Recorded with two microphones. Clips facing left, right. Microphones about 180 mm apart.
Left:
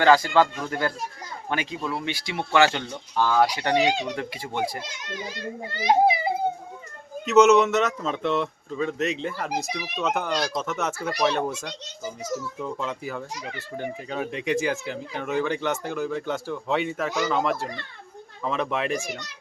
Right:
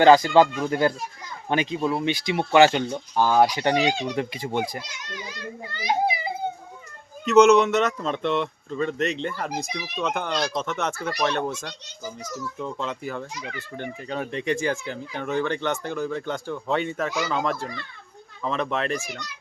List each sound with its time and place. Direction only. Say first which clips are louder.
0.0 s speech: right 4 dB; 20° right (ahead or behind)
3.8 s speech: left 4 dB; 20° left (ahead or behind)
4.1 s speech: right 4 dB; 20° right (ahead or behind)
5.7 s a child's voice: left 5 dB; 40° left (ahead or behind)
7.3 s speech: right 1 dB; 5° left (ahead or behind)
17.4 s speech: left 1 dB; 5° left (ahead or behind)